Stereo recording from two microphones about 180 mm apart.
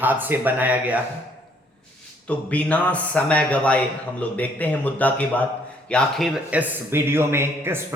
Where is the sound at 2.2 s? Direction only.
10° left (ahead or behind).